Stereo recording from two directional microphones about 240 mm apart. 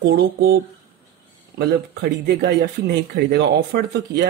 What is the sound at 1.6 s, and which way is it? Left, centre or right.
A man's voice, right.